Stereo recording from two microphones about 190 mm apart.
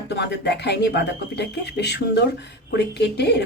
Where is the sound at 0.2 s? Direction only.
65° left (ahead or behind).